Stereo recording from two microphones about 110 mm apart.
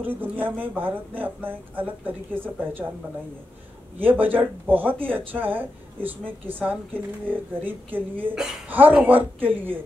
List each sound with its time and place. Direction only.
0.0 s speech: 15° right (ahead or behind)
4.0 s speech: 15° right (ahead or behind)